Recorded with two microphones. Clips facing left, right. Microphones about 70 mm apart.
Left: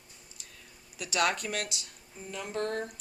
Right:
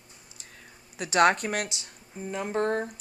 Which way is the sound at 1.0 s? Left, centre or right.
Right.